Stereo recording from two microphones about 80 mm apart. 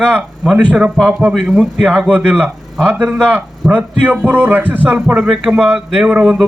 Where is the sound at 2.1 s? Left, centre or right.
Centre.